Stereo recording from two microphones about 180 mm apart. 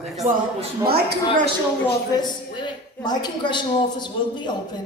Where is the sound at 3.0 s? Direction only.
25° left (ahead or behind).